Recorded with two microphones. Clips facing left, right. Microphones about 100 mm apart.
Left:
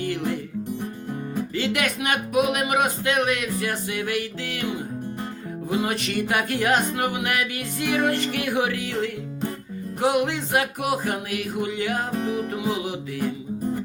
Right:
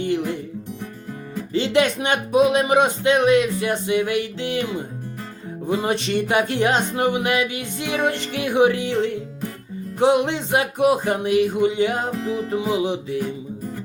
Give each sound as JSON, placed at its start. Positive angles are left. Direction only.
{"t": 0.0, "sound": "music", "side_deg": -20}
{"t": 1.5, "sound": "music", "side_deg": -25}
{"t": 5.6, "sound": "music", "side_deg": -30}